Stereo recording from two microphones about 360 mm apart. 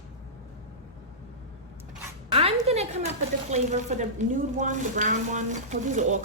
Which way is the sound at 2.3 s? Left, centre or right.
Centre.